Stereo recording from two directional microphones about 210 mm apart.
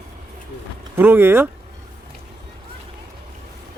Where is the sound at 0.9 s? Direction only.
10° right (ahead or behind).